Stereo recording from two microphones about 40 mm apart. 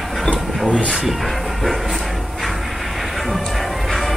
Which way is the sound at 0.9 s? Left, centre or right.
Centre.